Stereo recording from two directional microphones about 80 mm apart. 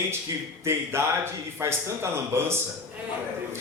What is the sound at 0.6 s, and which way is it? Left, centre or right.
A man's voice, right.